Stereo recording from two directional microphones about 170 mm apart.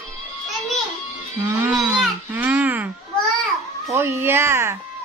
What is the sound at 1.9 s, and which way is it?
Baby cry, 10° right (ahead or behind).